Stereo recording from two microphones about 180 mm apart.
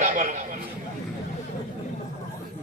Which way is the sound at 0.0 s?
45° right (ahead or behind).